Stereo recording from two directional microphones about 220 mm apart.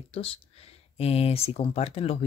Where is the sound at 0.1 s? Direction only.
25° left (ahead or behind).